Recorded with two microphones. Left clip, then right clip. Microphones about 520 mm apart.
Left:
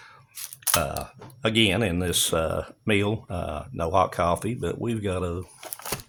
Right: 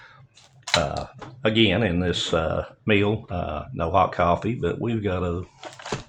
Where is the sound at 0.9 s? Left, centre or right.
Left.